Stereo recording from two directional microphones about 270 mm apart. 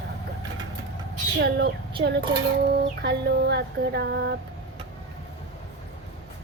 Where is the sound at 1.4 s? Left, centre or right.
Right.